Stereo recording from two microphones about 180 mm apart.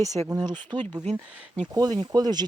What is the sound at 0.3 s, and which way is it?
Speech, 25° right (ahead or behind).